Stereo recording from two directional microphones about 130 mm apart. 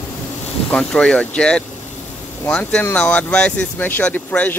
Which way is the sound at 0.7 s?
5° left (ahead or behind).